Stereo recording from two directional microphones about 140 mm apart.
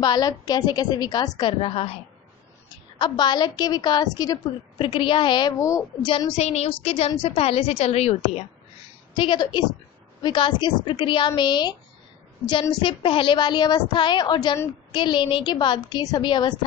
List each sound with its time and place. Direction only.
0.0 s a woman's voice: 30° left (ahead or behind)
1.5 s a woman's voice: 40° left (ahead or behind); by 5.9 s 25° left (ahead or behind)
6.0 s a woman's voice: 35° left (ahead or behind)
6.3 s a woman's voice: 50° left (ahead or behind)
9.1 s a woman's voice: 35° left (ahead or behind)
12.8 s a woman's voice: 40° left (ahead or behind)